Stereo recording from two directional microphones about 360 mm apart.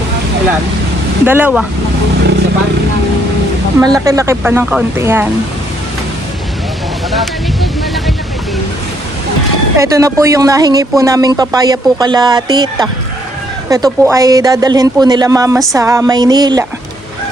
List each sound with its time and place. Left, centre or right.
1.2 s speech: centre
3.8 s speech: centre
7.1 s a sound: centre
9.7 s speech: centre